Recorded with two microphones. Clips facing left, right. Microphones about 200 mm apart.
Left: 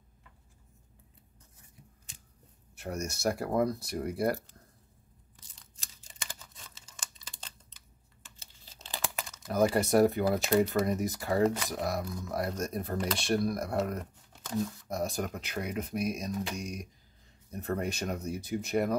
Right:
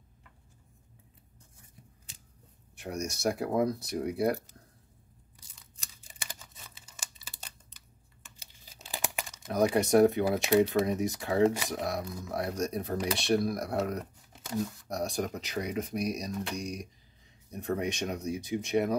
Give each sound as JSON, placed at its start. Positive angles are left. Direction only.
{"t": 2.7, "sound": "speech", "side_deg": 0}
{"t": 6.2, "sound": "computer keyboard", "side_deg": -10}
{"t": 8.4, "sound": "crumpling", "side_deg": -10}
{"t": 9.5, "sound": "speech", "side_deg": 0}